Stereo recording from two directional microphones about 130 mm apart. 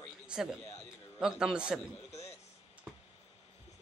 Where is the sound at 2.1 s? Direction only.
55° left (ahead or behind).